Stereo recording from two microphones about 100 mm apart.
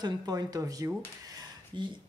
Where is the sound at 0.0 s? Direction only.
40° right (ahead or behind).